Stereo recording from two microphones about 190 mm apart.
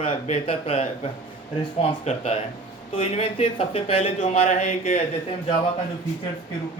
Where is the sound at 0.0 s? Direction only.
35° left (ahead or behind).